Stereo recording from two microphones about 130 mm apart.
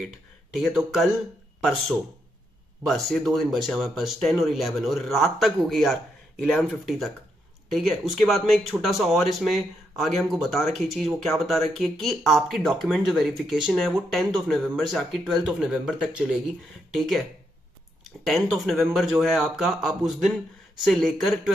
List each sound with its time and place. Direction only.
0.6 s speech: centre (ahead or behind)
18.2 s speech: centre (ahead or behind)